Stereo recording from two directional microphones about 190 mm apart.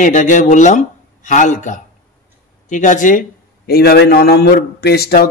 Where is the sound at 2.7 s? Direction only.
40° left (ahead or behind).